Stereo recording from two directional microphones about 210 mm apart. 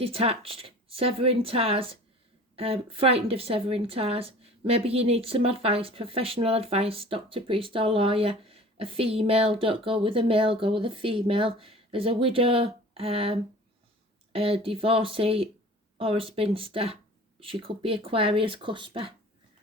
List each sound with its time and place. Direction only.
0.0 s a woman's voice: 30° right (ahead or behind)